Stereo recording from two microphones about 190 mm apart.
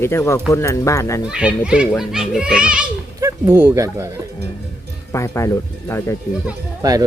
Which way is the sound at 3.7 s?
15° right (ahead or behind).